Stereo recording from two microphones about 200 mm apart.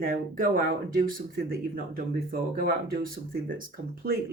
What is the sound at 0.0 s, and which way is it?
Speech, 45° right (ahead or behind).